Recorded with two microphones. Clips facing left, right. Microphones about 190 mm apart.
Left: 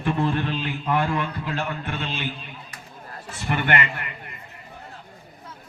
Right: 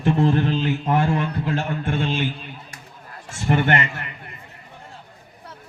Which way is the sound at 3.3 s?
45° right (ahead or behind).